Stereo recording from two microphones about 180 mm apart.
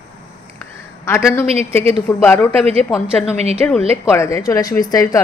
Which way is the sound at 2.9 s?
Centre (ahead or behind).